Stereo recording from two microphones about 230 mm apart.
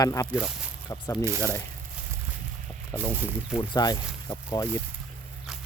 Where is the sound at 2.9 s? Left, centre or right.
Centre.